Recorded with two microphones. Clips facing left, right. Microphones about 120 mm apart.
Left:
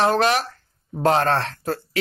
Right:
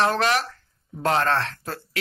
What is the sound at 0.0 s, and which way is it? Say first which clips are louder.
Speech: left 3 dB; 20° left (ahead or behind).